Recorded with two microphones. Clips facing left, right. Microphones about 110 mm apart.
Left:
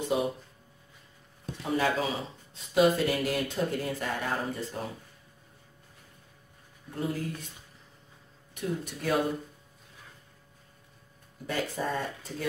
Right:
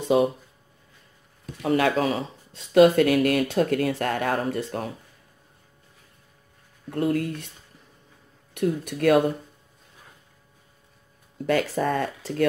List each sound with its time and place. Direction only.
1.6 s speech: 75° right (ahead or behind)
6.9 s speech: 70° right (ahead or behind)
8.5 s speech: 65° right (ahead or behind)
11.4 s speech: 80° right